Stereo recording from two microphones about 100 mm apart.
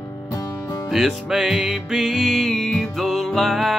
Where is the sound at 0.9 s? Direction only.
5° right (ahead or behind).